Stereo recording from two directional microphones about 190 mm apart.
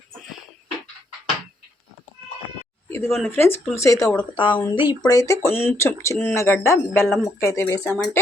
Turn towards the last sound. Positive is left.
turn(degrees=15)  # may be behind; listen again after turning